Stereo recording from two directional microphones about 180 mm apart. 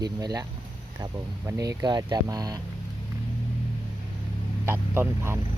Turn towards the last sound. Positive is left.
turn(degrees=-15)  # may be behind; listen again after turning